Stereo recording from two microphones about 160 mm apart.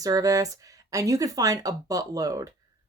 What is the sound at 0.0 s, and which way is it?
Speech, 20° right (ahead or behind).